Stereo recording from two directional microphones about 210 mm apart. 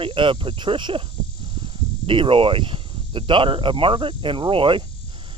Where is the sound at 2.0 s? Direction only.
25° right (ahead or behind).